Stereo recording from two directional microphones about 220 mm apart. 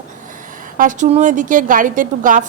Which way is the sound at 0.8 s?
35° right (ahead or behind).